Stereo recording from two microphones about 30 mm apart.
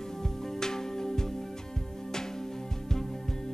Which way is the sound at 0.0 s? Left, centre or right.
Centre.